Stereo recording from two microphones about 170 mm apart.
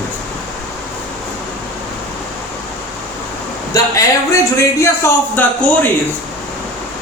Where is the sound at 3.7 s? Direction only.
20° left (ahead or behind).